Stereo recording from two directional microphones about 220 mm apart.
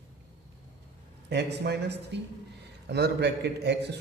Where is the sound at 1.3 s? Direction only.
50° right (ahead or behind).